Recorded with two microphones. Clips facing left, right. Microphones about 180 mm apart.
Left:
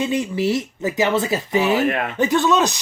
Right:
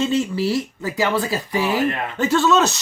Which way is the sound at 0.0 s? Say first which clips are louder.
Even; 15° left (ahead or behind).